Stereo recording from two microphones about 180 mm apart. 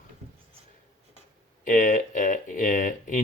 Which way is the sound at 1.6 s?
45° left (ahead or behind).